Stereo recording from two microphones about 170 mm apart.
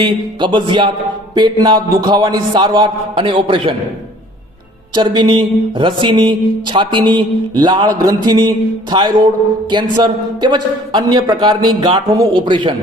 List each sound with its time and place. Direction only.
0.0 s speech: 30° right (ahead or behind)
4.9 s speech: 25° right (ahead or behind)